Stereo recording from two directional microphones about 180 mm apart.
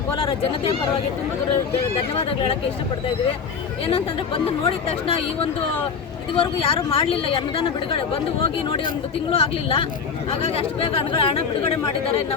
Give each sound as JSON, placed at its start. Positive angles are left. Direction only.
{"t": 0.2, "sound": "speech", "side_deg": 30}
{"t": 4.6, "sound": "speech", "side_deg": 30}